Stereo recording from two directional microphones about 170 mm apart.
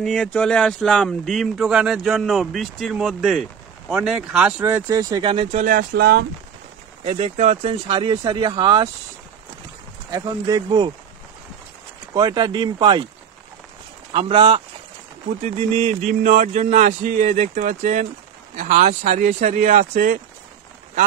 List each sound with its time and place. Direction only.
0.0 s speech: 5° left (ahead or behind); by 5.6 s 30° right (ahead or behind)
5.6 s speech: 55° right (ahead or behind)
7.0 s speech: 35° right (ahead or behind)
10.1 s speech: 20° right (ahead or behind)
12.1 s speech: 25° right (ahead or behind)
14.1 s speech: 30° right (ahead or behind)
15.2 s speech: 40° right (ahead or behind)